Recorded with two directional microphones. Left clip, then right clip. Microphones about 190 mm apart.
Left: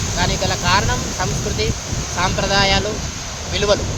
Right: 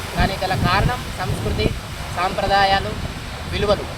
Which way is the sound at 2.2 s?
25° left (ahead or behind).